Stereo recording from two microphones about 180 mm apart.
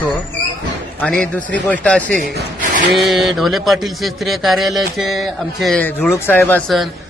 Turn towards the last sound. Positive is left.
turn(degrees=10)  # may be behind; listen again after turning